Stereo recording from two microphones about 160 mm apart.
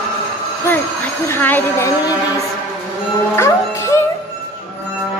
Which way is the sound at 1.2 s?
15° left (ahead or behind).